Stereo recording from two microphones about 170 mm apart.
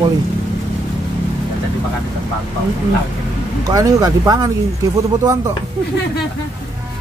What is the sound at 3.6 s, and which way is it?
Speech, 20° right (ahead or behind).